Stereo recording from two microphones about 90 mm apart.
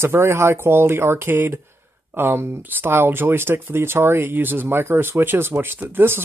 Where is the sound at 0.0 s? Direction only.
30° right (ahead or behind).